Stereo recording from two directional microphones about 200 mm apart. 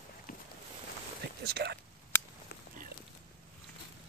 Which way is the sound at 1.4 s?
55° right (ahead or behind).